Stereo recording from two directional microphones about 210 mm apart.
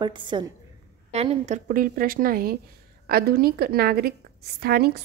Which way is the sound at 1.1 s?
30° right (ahead or behind).